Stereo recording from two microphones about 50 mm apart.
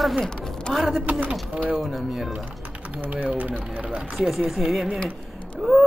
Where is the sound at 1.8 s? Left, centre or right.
Centre.